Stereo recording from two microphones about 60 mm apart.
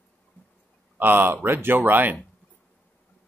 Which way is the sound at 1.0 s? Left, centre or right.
Right.